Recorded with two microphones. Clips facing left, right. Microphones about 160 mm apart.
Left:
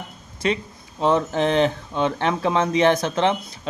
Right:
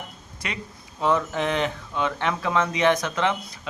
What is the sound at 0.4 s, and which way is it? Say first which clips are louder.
A man's voice: left 11 dB; 30° left (ahead or behind).